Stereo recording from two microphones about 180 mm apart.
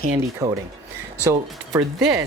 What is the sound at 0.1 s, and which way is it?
Speech, 10° right (ahead or behind).